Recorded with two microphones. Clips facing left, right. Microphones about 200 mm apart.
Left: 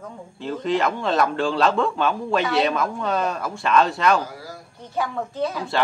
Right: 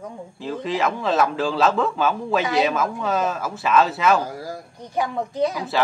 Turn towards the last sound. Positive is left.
turn(degrees=-15)  # may be behind; listen again after turning